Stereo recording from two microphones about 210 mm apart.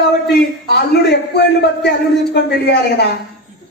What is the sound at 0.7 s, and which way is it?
Speech, 55° left (ahead or behind).